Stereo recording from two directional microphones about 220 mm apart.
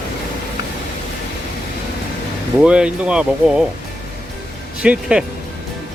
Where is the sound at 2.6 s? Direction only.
5° right (ahead or behind).